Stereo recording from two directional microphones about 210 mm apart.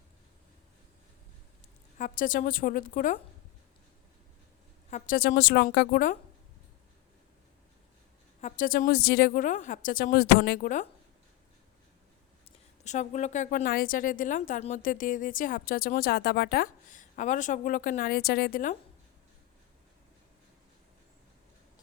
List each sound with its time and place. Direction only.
2.0 s speech: 40° left (ahead or behind)
4.9 s a woman's voice: 35° left (ahead or behind)
8.4 s speech: 35° left (ahead or behind)
12.8 s speech: 35° left (ahead or behind)